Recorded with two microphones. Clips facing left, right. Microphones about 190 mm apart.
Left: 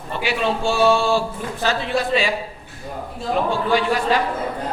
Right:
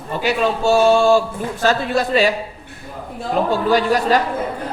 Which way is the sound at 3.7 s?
40° right (ahead or behind).